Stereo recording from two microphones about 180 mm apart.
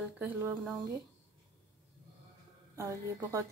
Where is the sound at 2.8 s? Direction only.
15° right (ahead or behind).